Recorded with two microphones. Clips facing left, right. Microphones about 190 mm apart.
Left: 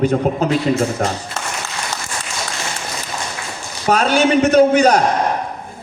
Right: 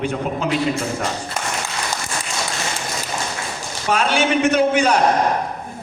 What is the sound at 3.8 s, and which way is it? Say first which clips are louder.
A man's voice: left 4 dB; 40° left (ahead or behind).